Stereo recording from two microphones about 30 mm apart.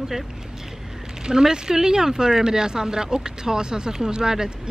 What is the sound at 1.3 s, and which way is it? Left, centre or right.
Speech, right.